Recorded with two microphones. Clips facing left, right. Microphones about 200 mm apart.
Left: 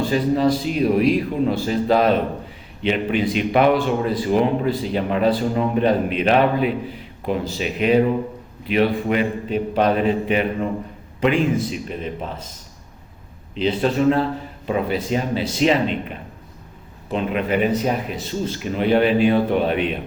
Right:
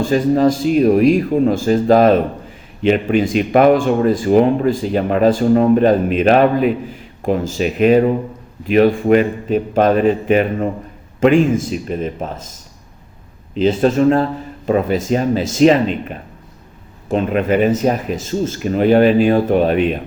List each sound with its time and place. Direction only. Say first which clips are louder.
0.0 s speech: right 5 dB; 45° right (ahead or behind)
13.6 s speech: right 6 dB; 45° right (ahead or behind)
17.1 s speech: right 6 dB; 45° right (ahead or behind)